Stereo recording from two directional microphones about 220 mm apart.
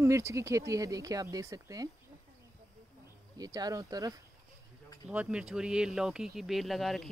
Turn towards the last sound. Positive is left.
turn(degrees=0)  # may be behind; listen again after turning